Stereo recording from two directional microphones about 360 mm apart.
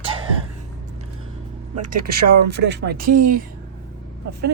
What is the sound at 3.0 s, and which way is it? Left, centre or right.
Speech, right.